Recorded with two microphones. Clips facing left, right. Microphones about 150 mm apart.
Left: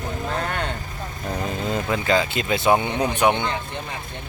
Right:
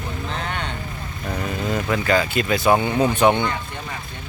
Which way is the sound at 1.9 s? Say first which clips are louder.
Right 2 dB; 20° left (ahead or behind).